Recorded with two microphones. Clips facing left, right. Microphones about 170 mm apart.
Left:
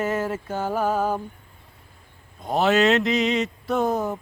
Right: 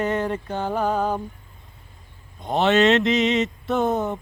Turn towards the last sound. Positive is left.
turn(degrees=0)  # may be behind; listen again after turning